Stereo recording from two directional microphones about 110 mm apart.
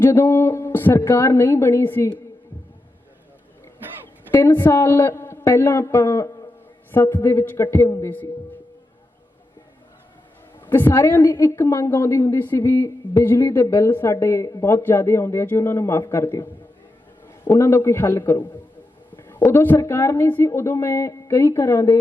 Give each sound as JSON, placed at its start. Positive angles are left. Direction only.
{"t": 0.0, "sound": "a woman's voice", "side_deg": 25}
{"t": 4.3, "sound": "a man's voice", "side_deg": 20}
{"t": 10.7, "sound": "a woman's voice", "side_deg": 20}